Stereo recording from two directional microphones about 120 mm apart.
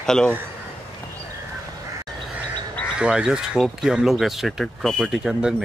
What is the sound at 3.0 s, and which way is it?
Speech, 5° right (ahead or behind).